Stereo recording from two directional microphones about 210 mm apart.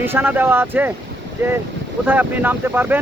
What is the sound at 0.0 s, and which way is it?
Speech, 10° right (ahead or behind).